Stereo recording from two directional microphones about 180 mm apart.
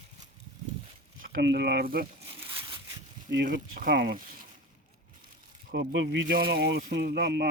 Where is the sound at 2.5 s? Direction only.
30° right (ahead or behind).